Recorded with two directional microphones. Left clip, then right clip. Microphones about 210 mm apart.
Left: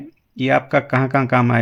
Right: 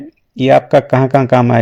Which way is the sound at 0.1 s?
25° right (ahead or behind).